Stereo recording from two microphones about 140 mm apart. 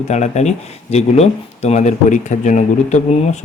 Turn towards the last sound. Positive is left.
turn(degrees=55)  # may be behind; listen again after turning